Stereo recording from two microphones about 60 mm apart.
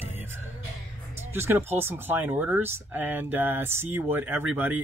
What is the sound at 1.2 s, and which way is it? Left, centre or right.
Speech, right.